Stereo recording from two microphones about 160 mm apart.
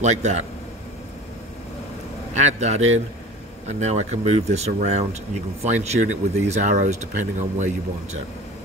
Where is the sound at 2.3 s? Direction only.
45° right (ahead or behind).